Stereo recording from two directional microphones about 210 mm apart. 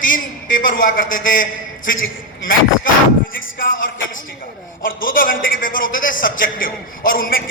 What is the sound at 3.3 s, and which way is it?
Speech, 40° left (ahead or behind).